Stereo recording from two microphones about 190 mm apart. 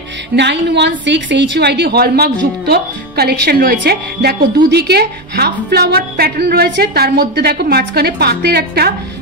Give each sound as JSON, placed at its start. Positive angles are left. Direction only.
{"t": 0.4, "sound": "a woman's voice", "side_deg": -65}